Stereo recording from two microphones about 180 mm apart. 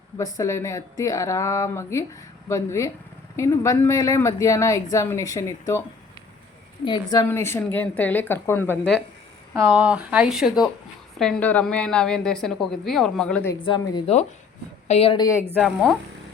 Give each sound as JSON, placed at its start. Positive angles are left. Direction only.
{"t": 0.2, "sound": "speech", "side_deg": 20}
{"t": 6.8, "sound": "speech", "side_deg": 25}
{"t": 9.6, "sound": "a woman's voice", "side_deg": -5}
{"t": 13.5, "sound": "a woman's voice", "side_deg": 25}
{"t": 15.6, "sound": "a woman's voice", "side_deg": 5}